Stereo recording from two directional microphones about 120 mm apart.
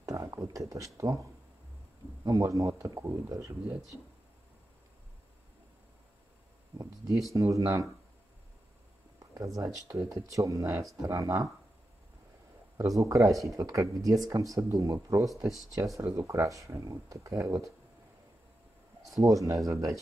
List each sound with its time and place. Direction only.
0.0 s speech: 25° right (ahead or behind)
2.2 s speech: 30° right (ahead or behind)
7.3 s speech: 25° right (ahead or behind)
9.2 s speech: 30° right (ahead or behind)
12.7 s speech: 25° right (ahead or behind)
13.3 s speech: centre (ahead or behind)
13.6 s speech: 25° right (ahead or behind)
19.2 s speech: 30° right (ahead or behind)